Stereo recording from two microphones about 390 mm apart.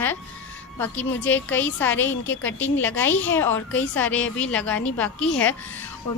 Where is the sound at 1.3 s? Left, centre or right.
Centre.